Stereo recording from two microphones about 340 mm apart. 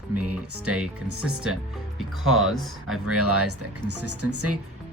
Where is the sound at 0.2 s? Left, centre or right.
Right.